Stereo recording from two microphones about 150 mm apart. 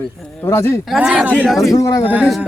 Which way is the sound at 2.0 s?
10° right (ahead or behind).